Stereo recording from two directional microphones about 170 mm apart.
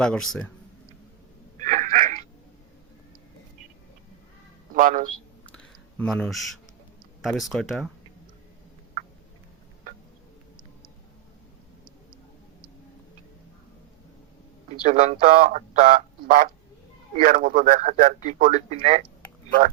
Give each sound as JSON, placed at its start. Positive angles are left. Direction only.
{"t": 0.0, "sound": "speech", "side_deg": 5}
{"t": 1.5, "sound": "a sound", "side_deg": -45}
{"t": 4.7, "sound": "a man's voice", "side_deg": -55}
{"t": 6.0, "sound": "speech", "side_deg": 5}
{"t": 14.8, "sound": "speech", "side_deg": -45}
{"t": 18.7, "sound": "speech", "side_deg": -40}